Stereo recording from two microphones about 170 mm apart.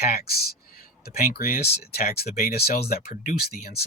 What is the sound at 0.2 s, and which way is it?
Speech, 65° left (ahead or behind).